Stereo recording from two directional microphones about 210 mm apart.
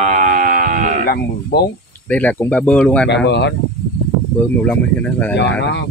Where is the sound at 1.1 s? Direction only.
45° left (ahead or behind).